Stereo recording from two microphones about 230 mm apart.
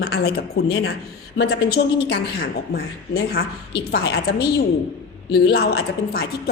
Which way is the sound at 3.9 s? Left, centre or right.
Left.